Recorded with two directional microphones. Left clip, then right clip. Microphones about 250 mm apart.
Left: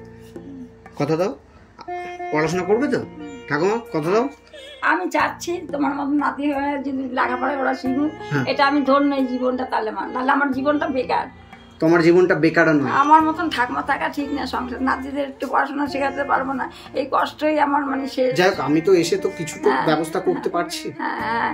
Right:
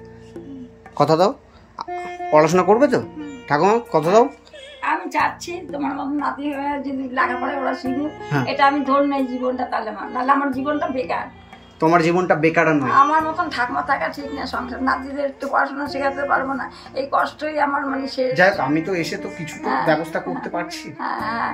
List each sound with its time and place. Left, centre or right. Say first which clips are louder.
1.9 s music: even; centre
2.4 s a man's voice: right 5 dB; centre
4.8 s a woman's voice: left 1 dB; centre
11.8 s a man's voice: left 1 dB; centre
12.9 s a woman's voice: left 1 dB; left
13.3 s a woman's voice: even; centre